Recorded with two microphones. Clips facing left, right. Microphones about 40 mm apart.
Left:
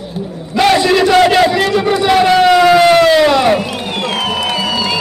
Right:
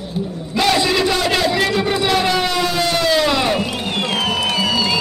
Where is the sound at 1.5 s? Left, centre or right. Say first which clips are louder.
Left 4 dB; centre.